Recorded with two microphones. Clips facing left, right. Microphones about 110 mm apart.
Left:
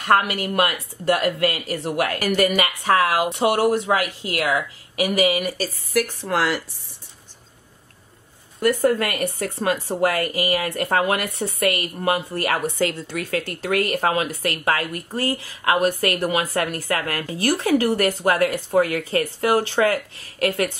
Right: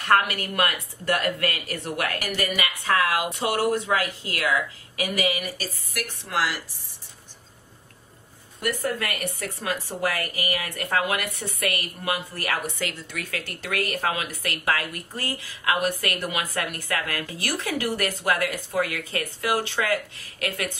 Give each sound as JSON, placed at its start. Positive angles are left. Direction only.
{"t": 0.0, "sound": "a woman's voice", "side_deg": 25}
{"t": 5.9, "sound": "speech", "side_deg": 45}
{"t": 8.6, "sound": "a woman's voice", "side_deg": 30}